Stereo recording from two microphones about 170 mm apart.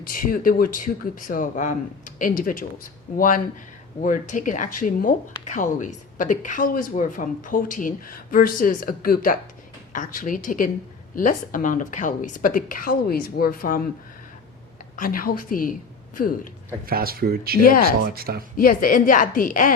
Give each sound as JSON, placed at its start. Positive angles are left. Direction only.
{"t": 0.0, "sound": "speech", "side_deg": 55}
{"t": 14.9, "sound": "a woman's voice", "side_deg": 55}
{"t": 16.8, "sound": "speech", "side_deg": -60}
{"t": 17.6, "sound": "a woman's voice", "side_deg": 55}
{"t": 18.0, "sound": "speech", "side_deg": -65}
{"t": 18.5, "sound": "speech", "side_deg": 55}